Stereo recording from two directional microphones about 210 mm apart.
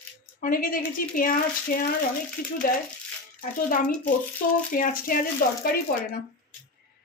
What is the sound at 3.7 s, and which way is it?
A woman's voice, 40° left (ahead or behind).